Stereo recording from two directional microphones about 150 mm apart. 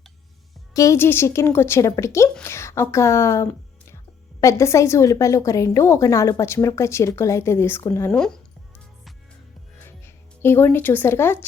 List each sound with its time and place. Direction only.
0.7 s speech: 20° left (ahead or behind)
10.4 s speech: 15° left (ahead or behind)